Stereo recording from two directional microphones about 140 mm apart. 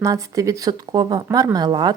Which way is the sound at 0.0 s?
25° right (ahead or behind).